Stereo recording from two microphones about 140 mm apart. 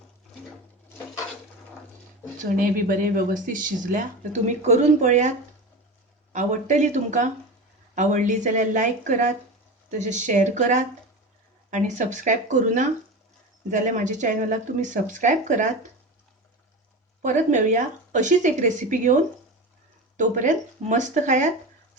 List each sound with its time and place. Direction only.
2.4 s speech: 75° right (ahead or behind); by 5.3 s 60° right (ahead or behind)
6.3 s speech: 60° right (ahead or behind)
17.2 s speech: 60° right (ahead or behind)